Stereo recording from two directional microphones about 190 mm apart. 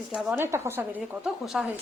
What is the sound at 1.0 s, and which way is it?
Speech, centre (ahead or behind).